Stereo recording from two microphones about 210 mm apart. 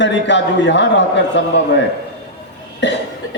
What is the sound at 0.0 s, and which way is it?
A man's voice, 60° left (ahead or behind).